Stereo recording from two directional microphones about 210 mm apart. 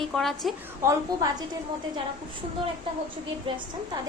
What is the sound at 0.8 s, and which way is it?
Speech, 15° right (ahead or behind).